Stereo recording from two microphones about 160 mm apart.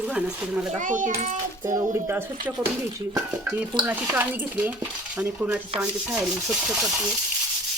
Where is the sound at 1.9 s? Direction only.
15° right (ahead or behind).